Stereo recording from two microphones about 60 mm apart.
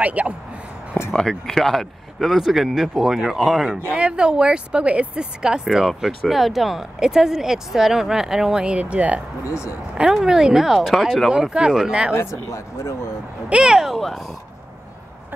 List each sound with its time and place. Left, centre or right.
0.0 s speech: right
1.0 s a sound: left
1.5 s speech: centre
3.9 s speech: centre
9.4 s speech: left
9.9 s speech: centre
12.2 s speech: left
13.5 s speech: centre